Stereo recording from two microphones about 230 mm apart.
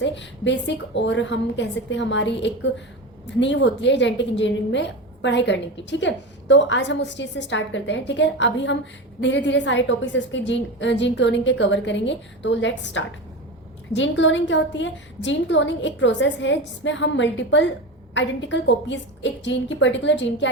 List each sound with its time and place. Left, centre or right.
0.0 s a woman's voice: left